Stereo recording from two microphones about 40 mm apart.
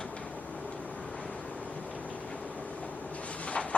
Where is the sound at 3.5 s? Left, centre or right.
Left.